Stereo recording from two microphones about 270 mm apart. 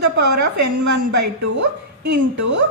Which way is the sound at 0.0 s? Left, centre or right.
Right.